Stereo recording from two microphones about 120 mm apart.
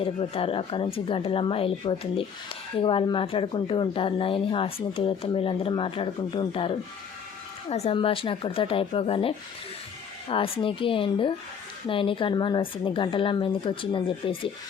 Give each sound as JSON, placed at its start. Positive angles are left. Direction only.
{"t": 0.0, "sound": "a woman's voice", "side_deg": 50}
{"t": 7.7, "sound": "speech", "side_deg": 60}
{"t": 7.9, "sound": "a woman's voice", "side_deg": 50}